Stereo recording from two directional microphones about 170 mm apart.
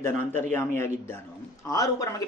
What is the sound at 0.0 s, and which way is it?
Speech, 15° left (ahead or behind).